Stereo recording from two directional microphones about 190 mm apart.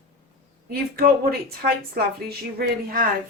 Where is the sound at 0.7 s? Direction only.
50° right (ahead or behind).